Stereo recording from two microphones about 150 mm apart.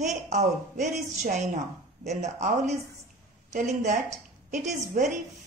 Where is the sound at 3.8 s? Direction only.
55° right (ahead or behind).